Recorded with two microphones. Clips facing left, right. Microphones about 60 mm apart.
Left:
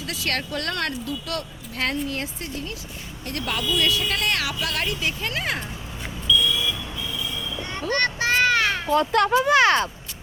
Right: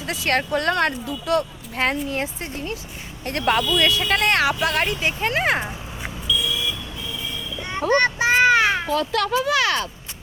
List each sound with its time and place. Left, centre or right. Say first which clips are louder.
0.0 s speech: right 5 dB; right
3.2 s speech: right 6 dB; right
6.2 s vehicle: left 3 dB; centre
7.9 s children playing: right 4 dB; centre
8.9 s speech: left 2 dB; left